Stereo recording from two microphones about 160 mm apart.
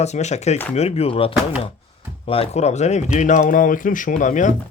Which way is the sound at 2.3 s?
40° left (ahead or behind).